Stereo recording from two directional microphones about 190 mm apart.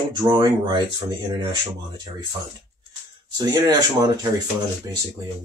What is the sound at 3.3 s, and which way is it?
Speech, 20° right (ahead or behind).